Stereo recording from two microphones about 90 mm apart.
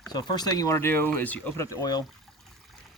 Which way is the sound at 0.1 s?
50° left (ahead or behind).